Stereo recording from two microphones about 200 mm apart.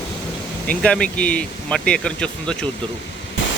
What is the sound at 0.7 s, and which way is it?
Speech, 5° left (ahead or behind).